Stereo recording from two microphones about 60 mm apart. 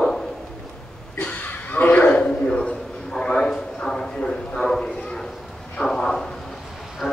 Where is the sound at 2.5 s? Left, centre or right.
Centre.